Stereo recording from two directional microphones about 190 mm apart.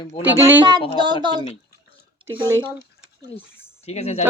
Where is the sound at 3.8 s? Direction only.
35° left (ahead or behind).